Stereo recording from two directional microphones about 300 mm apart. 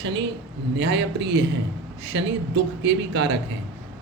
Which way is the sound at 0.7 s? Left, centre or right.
Right.